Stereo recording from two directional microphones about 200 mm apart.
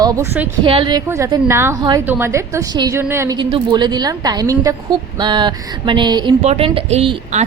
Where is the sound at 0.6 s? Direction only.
25° right (ahead or behind).